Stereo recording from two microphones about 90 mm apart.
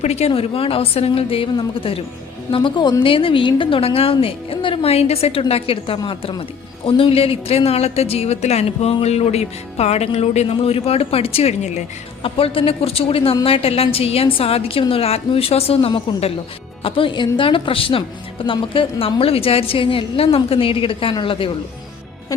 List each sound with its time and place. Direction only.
0.3 s a woman's voice: 90° left
2.5 s a woman's voice: 65° left (ahead or behind)
3.0 s a woman's voice: 80° left
6.0 s a woman's voice: 75° left (ahead or behind)
6.8 s a woman's voice: 90° left
10.1 s a woman's voice: 90° left
18.4 s a woman's voice: 75° left (ahead or behind)